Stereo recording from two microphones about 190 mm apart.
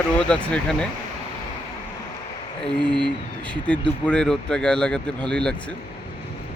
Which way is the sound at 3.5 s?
5° left (ahead or behind).